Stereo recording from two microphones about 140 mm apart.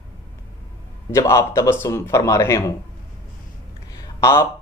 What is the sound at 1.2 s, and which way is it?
Speech, 20° left (ahead or behind).